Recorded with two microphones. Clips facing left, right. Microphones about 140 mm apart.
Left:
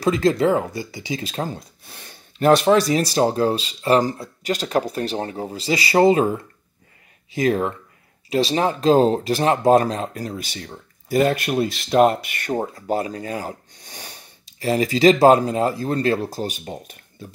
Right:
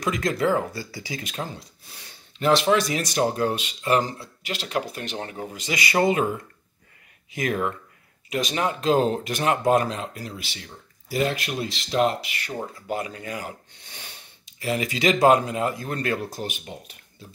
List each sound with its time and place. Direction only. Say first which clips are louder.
0.0 s speech: left 6 dB; 30° left (ahead or behind)
1.6 s speech: left 3 dB; 55° left (ahead or behind)